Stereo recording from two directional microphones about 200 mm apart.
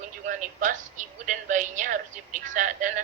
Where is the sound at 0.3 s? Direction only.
40° right (ahead or behind).